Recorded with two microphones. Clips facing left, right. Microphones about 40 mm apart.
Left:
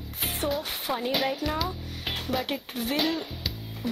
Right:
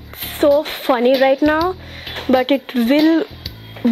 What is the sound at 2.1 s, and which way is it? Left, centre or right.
Music, right.